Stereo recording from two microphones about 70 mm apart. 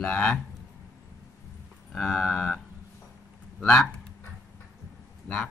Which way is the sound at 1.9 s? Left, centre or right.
Centre.